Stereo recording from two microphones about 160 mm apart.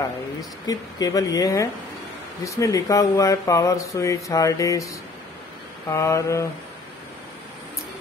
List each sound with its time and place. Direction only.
0.4 s speech: 25° left (ahead or behind)